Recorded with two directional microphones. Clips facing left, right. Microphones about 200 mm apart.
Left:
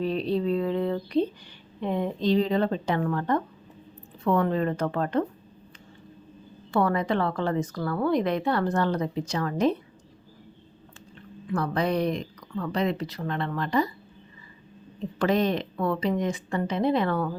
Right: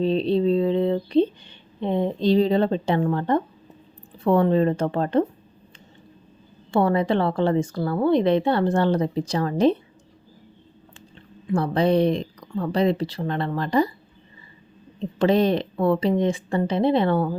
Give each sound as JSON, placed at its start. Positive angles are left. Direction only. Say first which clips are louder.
{"t": 0.0, "sound": "a woman's voice", "louder": "right 6 dB", "side_deg": -25}
{"t": 6.7, "sound": "a woman's voice", "louder": "right 4 dB", "side_deg": -25}
{"t": 11.5, "sound": "speech", "louder": "right 6 dB", "side_deg": -30}
{"t": 14.9, "sound": "a woman's voice", "louder": "right 5 dB", "side_deg": -25}